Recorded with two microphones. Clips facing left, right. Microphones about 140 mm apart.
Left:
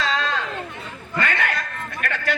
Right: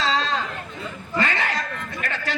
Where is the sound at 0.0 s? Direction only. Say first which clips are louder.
Right 1 dB; 50° left (ahead or behind).